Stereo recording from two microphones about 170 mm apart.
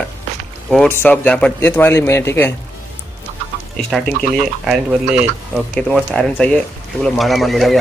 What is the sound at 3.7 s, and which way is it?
Speech, centre (ahead or behind).